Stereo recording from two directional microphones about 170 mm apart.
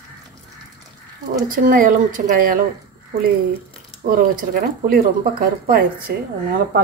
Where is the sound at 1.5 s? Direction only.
55° right (ahead or behind).